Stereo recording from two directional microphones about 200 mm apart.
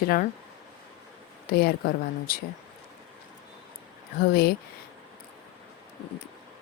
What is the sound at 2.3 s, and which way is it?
Speech, 45° left (ahead or behind).